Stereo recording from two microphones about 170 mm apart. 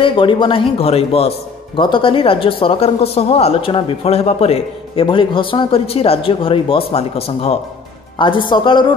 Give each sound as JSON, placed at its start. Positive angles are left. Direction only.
{"t": 0.0, "sound": "speech", "side_deg": 30}